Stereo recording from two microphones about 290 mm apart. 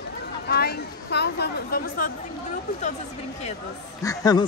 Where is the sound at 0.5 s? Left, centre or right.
Left.